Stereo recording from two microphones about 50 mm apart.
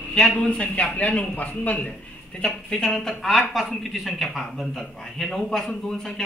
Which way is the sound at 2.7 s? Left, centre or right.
Centre.